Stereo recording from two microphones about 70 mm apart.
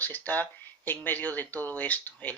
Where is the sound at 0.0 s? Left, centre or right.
Left.